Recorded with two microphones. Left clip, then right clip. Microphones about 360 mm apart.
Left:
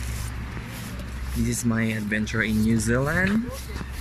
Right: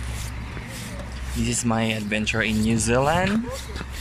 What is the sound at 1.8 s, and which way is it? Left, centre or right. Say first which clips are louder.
Speech: right 2 dB; right.